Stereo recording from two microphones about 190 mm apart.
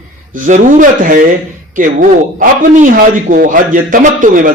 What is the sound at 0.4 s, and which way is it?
Speech, 45° right (ahead or behind).